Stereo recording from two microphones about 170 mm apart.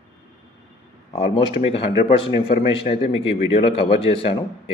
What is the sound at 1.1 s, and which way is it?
Speech, 35° left (ahead or behind).